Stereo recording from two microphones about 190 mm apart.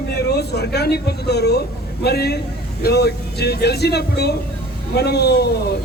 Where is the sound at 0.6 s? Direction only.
55° left (ahead or behind).